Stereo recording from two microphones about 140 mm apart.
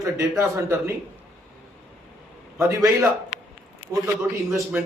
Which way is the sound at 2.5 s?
20° right (ahead or behind).